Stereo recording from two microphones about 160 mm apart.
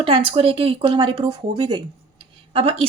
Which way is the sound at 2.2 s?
35° right (ahead or behind).